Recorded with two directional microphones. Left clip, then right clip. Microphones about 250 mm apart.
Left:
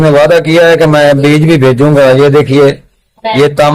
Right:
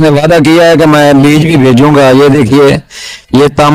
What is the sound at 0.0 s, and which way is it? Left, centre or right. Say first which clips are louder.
A man's voice: even; right.